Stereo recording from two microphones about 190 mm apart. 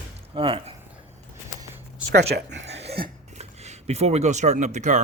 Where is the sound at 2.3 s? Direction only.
65° right (ahead or behind).